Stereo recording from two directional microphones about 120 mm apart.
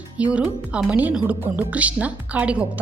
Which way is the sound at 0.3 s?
10° right (ahead or behind).